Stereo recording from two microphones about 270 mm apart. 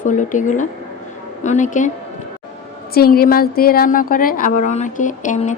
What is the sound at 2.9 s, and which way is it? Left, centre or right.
A woman's voice, left.